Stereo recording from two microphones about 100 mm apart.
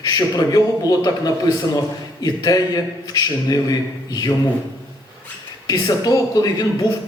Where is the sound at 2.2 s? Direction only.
40° left (ahead or behind).